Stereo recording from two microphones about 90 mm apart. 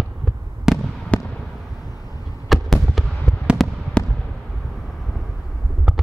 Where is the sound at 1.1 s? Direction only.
15° left (ahead or behind).